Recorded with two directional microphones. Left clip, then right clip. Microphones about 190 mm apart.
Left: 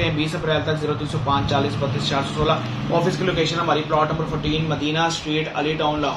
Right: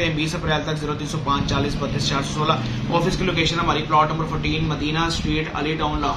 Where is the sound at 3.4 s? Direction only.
35° right (ahead or behind).